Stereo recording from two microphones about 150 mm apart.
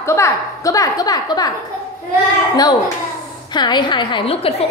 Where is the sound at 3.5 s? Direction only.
30° left (ahead or behind).